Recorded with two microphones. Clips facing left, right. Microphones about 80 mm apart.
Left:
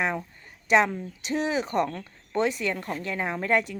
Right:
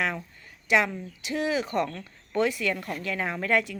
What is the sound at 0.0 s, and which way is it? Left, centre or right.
Speech, left.